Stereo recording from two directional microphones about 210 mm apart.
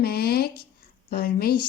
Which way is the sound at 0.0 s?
50° left (ahead or behind).